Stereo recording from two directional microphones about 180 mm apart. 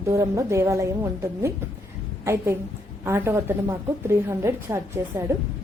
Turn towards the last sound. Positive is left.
turn(degrees=-15)  # may be behind; listen again after turning